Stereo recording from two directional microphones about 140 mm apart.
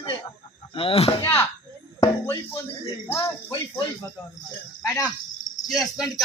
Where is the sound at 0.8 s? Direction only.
40° left (ahead or behind).